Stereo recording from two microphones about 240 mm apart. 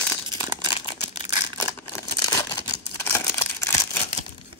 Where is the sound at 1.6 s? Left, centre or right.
Centre.